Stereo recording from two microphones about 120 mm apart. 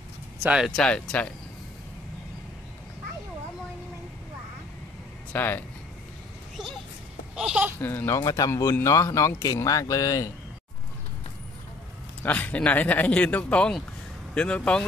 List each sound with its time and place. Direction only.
0.5 s speech: 5° right (ahead or behind)
0.7 s speech: 5° left (ahead or behind)
5.3 s speech: 15° left (ahead or behind)
7.3 s speech: 5° right (ahead or behind)
7.8 s speech: 20° left (ahead or behind)
8.2 s speech: 30° left (ahead or behind)
12.2 s speech: 15° left (ahead or behind)